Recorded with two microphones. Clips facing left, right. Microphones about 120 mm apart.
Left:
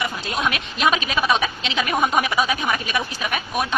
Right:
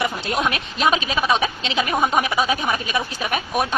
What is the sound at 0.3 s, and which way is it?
A woman's voice, 30° right (ahead or behind).